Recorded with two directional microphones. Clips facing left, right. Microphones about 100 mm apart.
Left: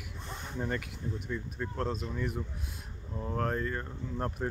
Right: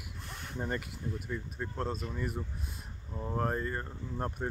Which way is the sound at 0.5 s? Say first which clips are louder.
Left 1 dB; 10° right (ahead or behind).